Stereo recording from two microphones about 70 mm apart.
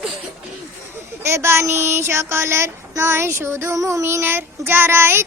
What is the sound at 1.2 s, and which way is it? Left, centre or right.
Child singing, right.